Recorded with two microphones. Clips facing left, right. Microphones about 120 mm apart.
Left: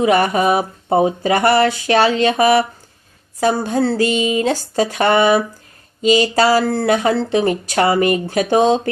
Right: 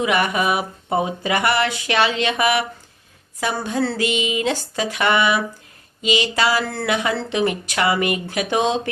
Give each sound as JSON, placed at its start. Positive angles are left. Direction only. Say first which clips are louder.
{"t": 0.0, "sound": "speech", "louder": "left 5 dB", "side_deg": 40}